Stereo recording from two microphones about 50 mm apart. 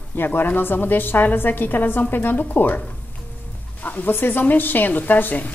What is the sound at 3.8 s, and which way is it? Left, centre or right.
A woman's voice, left.